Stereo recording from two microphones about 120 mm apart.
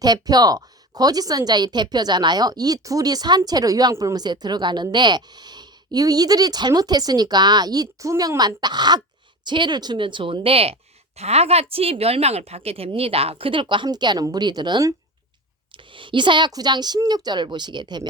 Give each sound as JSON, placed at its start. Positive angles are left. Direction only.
{"t": 0.0, "sound": "a woman's voice", "side_deg": -35}